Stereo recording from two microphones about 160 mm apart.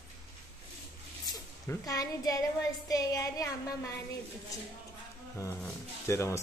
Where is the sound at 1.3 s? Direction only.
20° left (ahead or behind).